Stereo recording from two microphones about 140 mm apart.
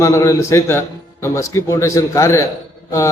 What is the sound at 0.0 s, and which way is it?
A man's voice, 20° left (ahead or behind).